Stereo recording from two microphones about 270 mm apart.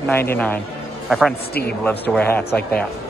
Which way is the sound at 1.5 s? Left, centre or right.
Left.